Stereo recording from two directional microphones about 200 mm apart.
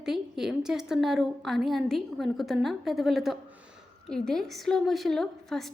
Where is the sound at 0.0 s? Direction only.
Centre (ahead or behind).